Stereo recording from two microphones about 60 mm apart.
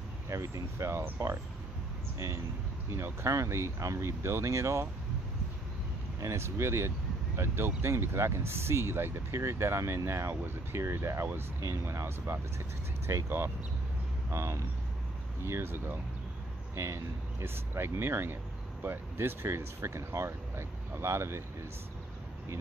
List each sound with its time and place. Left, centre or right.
0.3 s speech: right
2.1 s speech: right
6.2 s speech: right